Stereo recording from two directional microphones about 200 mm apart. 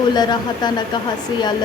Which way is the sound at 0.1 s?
20° left (ahead or behind).